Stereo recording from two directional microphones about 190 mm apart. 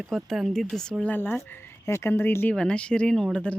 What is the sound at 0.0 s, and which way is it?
Speech, centre (ahead or behind).